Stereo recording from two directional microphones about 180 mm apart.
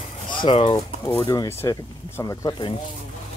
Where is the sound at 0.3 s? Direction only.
25° left (ahead or behind).